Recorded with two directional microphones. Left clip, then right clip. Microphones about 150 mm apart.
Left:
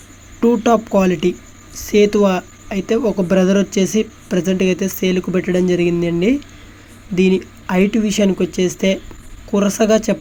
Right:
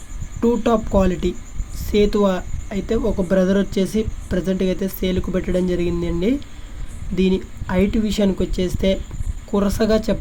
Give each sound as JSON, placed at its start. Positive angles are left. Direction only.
{"t": 0.3, "sound": "speech", "side_deg": 15}